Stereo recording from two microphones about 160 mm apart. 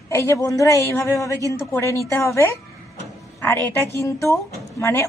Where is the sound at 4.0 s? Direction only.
20° left (ahead or behind).